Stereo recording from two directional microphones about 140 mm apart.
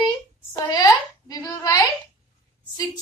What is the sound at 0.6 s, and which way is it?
A woman's voice, 25° left (ahead or behind).